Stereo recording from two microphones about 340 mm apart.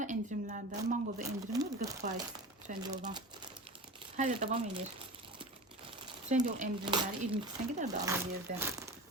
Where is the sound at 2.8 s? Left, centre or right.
Centre.